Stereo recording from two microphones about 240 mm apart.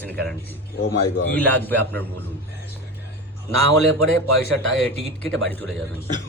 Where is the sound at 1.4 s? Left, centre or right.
Centre.